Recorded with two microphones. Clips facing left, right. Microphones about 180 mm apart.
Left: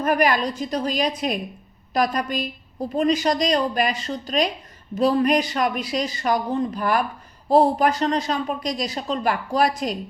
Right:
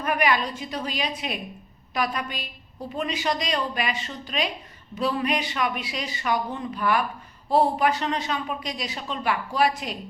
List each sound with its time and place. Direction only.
0.0 s a woman's voice: 40° left (ahead or behind)